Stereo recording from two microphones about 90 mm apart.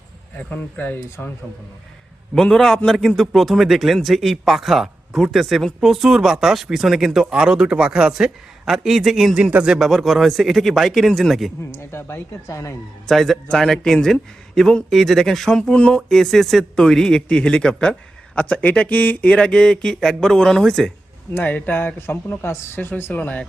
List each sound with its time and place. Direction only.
0.3 s speech: 20° left (ahead or behind)
2.3 s a man's voice: 5° left (ahead or behind)
11.7 s speech: 30° left (ahead or behind)
13.1 s a man's voice: 5° left (ahead or behind)
21.3 s speech: 20° left (ahead or behind)